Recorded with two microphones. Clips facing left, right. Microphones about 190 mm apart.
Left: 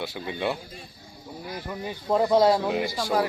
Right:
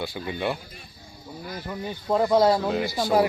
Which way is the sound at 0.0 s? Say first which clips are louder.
Right 1 dB; centre (ahead or behind).